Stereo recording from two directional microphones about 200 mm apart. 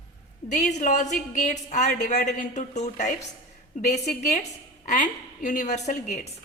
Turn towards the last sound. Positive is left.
turn(degrees=35)  # may be behind; listen again after turning